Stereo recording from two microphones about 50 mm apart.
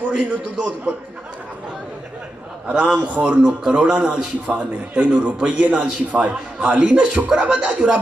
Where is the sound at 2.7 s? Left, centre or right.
Centre.